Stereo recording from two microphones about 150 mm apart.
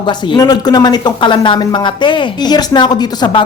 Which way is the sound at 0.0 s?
30° left (ahead or behind).